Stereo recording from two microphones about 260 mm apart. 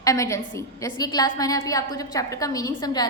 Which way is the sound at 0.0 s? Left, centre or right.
Centre.